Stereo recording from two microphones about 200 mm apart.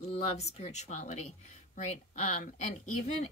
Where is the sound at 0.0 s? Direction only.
30° left (ahead or behind).